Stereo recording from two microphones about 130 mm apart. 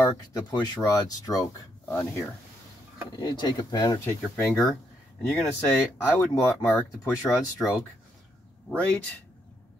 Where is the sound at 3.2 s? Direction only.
35° left (ahead or behind).